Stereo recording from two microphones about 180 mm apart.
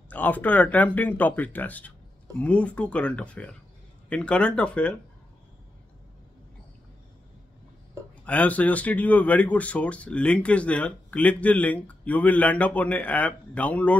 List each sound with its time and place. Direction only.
0.1 s speech: 10° left (ahead or behind)
8.3 s speech: 10° left (ahead or behind)